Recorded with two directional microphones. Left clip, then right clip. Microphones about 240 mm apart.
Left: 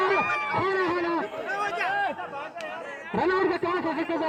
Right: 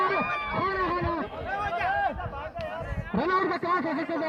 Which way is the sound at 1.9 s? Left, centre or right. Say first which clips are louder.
Right 2 dB; centre.